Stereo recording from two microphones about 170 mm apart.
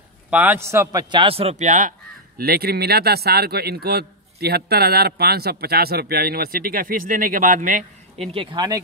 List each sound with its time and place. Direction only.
0.3 s a man's voice: 10° right (ahead or behind)
1.1 s speech: 35° right (ahead or behind); by 8.3 s 50° right (ahead or behind)
8.3 s speech: 30° right (ahead or behind)